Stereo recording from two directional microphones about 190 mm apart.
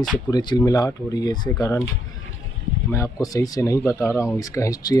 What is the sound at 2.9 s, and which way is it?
Speech, 15° left (ahead or behind).